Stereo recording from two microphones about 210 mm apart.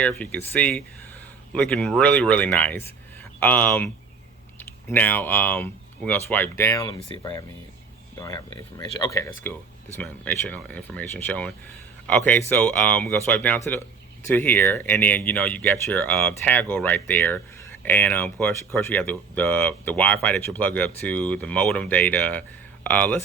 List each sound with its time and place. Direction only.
0.0 s speech: 5° left (ahead or behind)
4.9 s speech: 10° left (ahead or behind)